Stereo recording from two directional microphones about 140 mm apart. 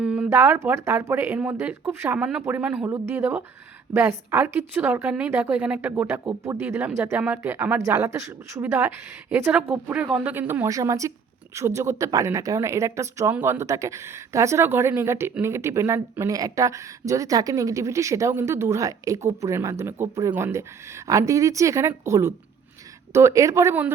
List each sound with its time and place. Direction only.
0.0 s a sound: 10° right (ahead or behind)
0.3 s a woman's voice: 15° right (ahead or behind)
2.1 s a woman's voice: 5° right (ahead or behind)